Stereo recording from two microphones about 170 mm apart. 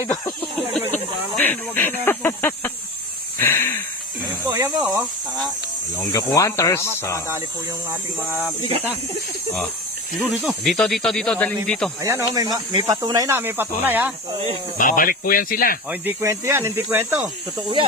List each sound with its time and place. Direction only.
0.7 s speech: 10° left (ahead or behind)
4.4 s speech: 25° right (ahead or behind)
6.0 s speech: 20° left (ahead or behind)
8.3 s speech: 10° right (ahead or behind)
10.2 s speech: centre (ahead or behind)
12.0 s speech: 20° right (ahead or behind)
14.8 s speech: 50° left (ahead or behind)
15.9 s speech: 15° right (ahead or behind)